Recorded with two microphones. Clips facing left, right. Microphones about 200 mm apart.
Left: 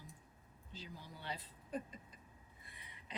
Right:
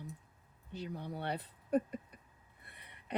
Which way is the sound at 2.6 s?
60° right (ahead or behind).